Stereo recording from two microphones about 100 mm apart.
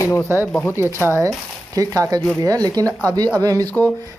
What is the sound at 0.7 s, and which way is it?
Speech, 25° right (ahead or behind).